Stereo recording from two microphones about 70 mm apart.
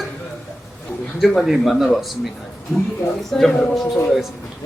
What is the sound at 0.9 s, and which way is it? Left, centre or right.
A man's voice, centre.